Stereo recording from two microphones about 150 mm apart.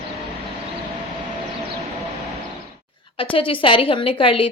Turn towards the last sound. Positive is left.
turn(degrees=35)  # may be behind; listen again after turning